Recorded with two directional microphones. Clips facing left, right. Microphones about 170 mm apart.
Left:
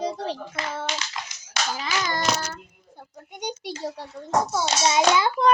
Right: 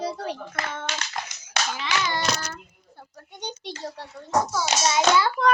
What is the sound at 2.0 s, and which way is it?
Child singing, 45° left (ahead or behind).